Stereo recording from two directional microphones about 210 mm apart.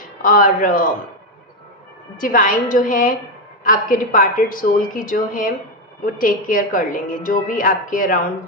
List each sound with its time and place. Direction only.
0.2 s a woman's voice: 40° left (ahead or behind)
2.1 s a woman's voice: 40° left (ahead or behind)